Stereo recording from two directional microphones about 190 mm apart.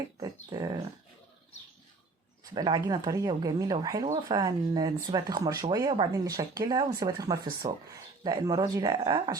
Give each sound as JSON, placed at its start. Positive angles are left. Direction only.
{"t": 0.2, "sound": "speech", "side_deg": -20}
{"t": 2.4, "sound": "speech", "side_deg": -20}